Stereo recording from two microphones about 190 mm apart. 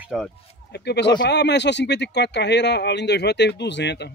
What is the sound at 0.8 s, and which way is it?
Speech, 60° left (ahead or behind).